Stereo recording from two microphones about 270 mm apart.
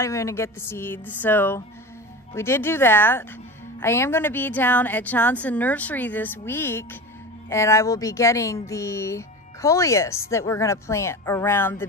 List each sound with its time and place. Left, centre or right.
0.0 s speech: centre